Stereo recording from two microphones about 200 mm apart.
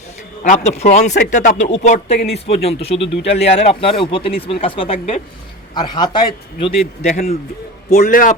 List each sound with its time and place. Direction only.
0.4 s a man's voice: 35° left (ahead or behind)